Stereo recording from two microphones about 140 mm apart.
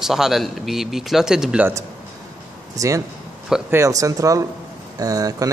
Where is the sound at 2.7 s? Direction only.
20° right (ahead or behind).